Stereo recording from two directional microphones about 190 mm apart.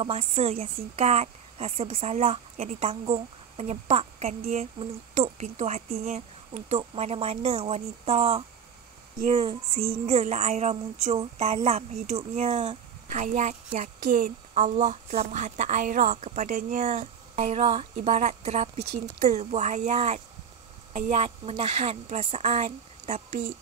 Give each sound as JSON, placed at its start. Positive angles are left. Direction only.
{"t": 0.0, "sound": "speech", "side_deg": -30}